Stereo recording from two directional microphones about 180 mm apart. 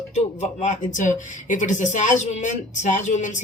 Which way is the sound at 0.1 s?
40° left (ahead or behind).